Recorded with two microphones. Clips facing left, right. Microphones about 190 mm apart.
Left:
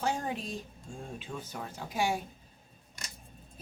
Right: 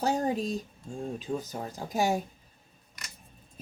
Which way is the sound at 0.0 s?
40° right (ahead or behind).